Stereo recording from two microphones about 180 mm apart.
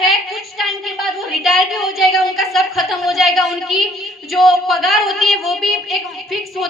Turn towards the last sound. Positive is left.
turn(degrees=0)  # may be behind; listen again after turning